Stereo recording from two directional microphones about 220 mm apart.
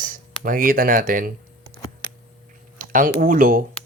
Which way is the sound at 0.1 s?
40° right (ahead or behind).